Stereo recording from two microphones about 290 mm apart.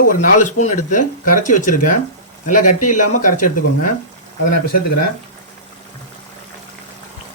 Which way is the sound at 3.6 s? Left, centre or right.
Left.